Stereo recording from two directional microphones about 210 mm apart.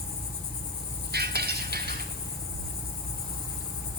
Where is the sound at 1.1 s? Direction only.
50° right (ahead or behind).